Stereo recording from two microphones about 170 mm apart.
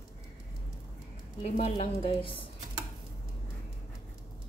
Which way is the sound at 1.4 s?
40° left (ahead or behind).